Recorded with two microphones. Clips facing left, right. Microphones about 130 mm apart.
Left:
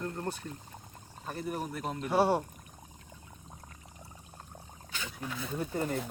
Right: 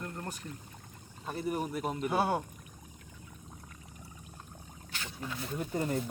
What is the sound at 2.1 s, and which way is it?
Speech, 30° left (ahead or behind).